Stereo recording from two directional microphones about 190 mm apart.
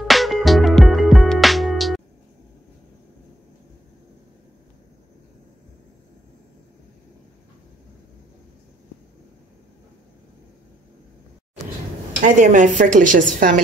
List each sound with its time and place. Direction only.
0.0 s music: centre (ahead or behind)
12.4 s a woman's voice: 40° right (ahead or behind)